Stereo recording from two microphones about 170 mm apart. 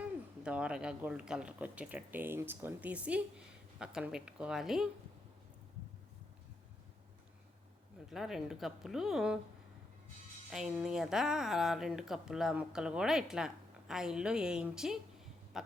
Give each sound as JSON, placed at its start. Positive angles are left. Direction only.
{"t": 0.0, "sound": "speech", "side_deg": -5}
{"t": 8.1, "sound": "speech", "side_deg": 0}
{"t": 10.5, "sound": "speech", "side_deg": -5}